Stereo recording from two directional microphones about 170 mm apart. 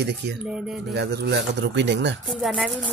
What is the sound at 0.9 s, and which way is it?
Speech, 80° right.